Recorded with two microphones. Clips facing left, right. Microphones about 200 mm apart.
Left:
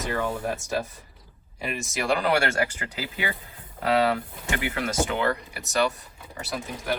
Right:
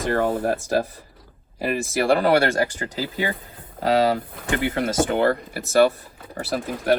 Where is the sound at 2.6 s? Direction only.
35° right (ahead or behind).